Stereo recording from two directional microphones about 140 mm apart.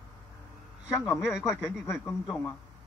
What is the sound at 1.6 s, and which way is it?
Speech, 20° left (ahead or behind).